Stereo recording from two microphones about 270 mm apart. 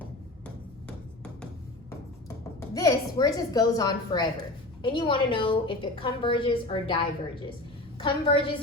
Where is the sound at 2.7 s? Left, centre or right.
Centre.